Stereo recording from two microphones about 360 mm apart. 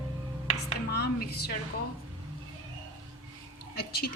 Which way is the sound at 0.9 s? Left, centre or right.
Left.